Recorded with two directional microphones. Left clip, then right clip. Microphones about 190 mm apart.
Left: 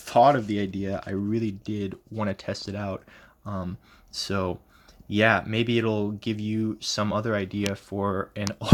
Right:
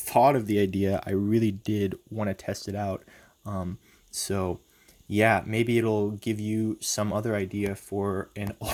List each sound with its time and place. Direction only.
0.0 s speech: 20° right (ahead or behind); by 2.0 s 40° right (ahead or behind)
2.1 s speech: 20° right (ahead or behind)